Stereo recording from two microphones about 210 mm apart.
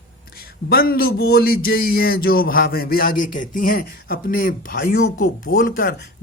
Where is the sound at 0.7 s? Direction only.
45° left (ahead or behind).